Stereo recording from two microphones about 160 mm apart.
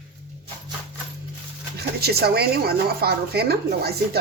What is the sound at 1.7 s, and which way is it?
Speech, 85° right.